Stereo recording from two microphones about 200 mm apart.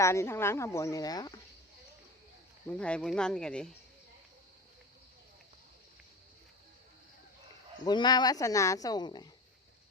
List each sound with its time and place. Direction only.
0.0 s speech: 15° left (ahead or behind)
2.6 s speech: 5° left (ahead or behind)
7.9 s speech: 20° left (ahead or behind)